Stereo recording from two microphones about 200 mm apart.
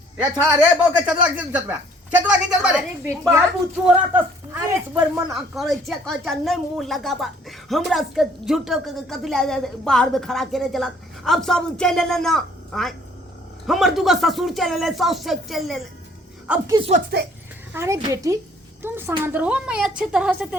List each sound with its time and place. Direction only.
0.2 s speech: 5° right (ahead or behind)
3.8 s a woman's voice: 5° right (ahead or behind)
16.6 s speech: 20° right (ahead or behind)
17.1 s speech: 50° right (ahead or behind)
17.7 s a woman's voice: 15° right (ahead or behind)